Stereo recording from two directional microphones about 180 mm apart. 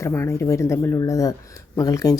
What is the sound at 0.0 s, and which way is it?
Speech, 15° left (ahead or behind).